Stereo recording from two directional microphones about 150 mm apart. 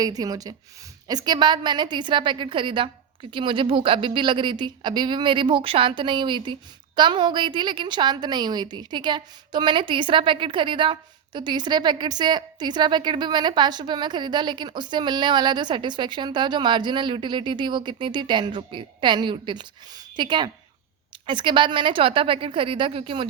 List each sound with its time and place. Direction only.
0.2 s a woman's voice: 25° right (ahead or behind)